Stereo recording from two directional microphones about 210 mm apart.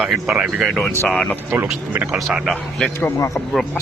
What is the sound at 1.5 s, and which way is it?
Speech, 10° right (ahead or behind).